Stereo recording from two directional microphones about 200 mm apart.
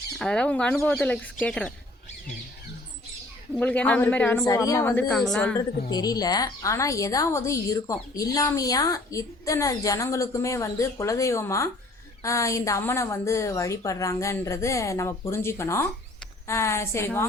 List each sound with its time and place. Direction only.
0.2 s a woman's voice: 5° left (ahead or behind)
3.5 s a woman's voice: 5° left (ahead or behind)
5.9 s a woman's voice: 20° left (ahead or behind)